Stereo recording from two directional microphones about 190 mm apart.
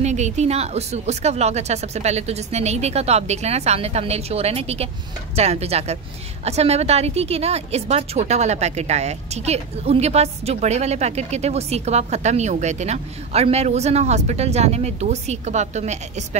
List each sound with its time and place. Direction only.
0.0 s a woman's voice: 35° right (ahead or behind)